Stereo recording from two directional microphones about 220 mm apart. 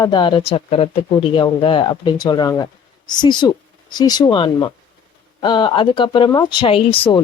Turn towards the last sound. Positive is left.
turn(degrees=25)  # may be behind; listen again after turning